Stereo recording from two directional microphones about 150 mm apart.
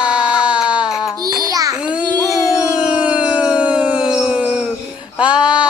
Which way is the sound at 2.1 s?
20° left (ahead or behind).